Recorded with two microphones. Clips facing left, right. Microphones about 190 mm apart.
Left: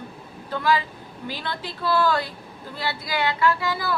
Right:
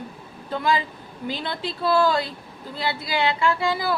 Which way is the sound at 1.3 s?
20° right (ahead or behind).